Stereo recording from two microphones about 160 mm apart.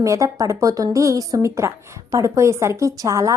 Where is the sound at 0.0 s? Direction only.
20° right (ahead or behind).